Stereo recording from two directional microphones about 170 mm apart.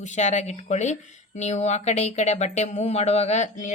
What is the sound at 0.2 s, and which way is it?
Speech, 45° left (ahead or behind).